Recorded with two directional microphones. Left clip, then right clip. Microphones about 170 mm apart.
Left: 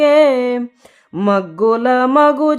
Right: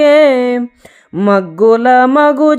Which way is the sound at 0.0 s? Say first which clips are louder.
Right 3 dB; 20° right (ahead or behind).